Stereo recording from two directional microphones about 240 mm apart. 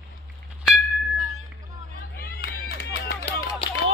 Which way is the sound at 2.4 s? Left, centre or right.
Left.